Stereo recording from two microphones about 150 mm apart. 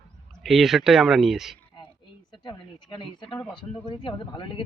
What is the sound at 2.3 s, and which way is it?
Speech, 30° left (ahead or behind).